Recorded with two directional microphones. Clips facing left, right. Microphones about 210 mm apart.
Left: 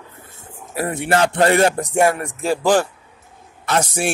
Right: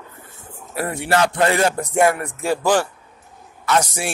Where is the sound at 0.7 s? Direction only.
20° left (ahead or behind).